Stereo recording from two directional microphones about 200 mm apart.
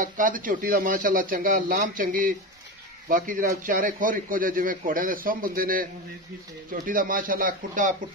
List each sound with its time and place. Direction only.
0.0 s a man's voice: 40° right (ahead or behind)